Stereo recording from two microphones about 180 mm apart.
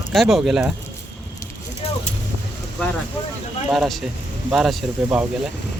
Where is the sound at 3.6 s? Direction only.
Centre (ahead or behind).